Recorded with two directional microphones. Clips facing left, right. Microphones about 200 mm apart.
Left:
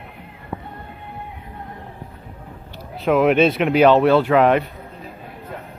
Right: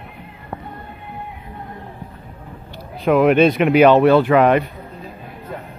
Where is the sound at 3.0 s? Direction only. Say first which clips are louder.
Right 2 dB; centre (ahead or behind).